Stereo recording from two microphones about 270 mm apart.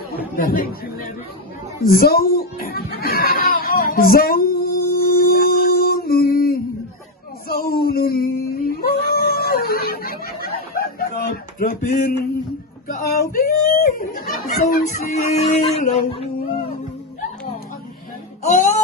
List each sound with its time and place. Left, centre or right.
0.3 s speech: left
1.8 s a sound: left
18.4 s music: left